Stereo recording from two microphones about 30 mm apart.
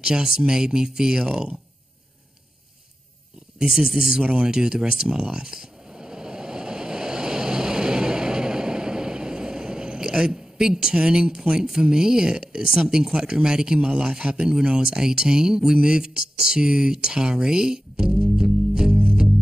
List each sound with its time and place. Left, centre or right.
0.0 s speech: right
3.5 s speech: centre
4.2 s speech: right
4.5 s speech: right
5.1 s a sound: right
11.9 s speech: right
18.4 s music: right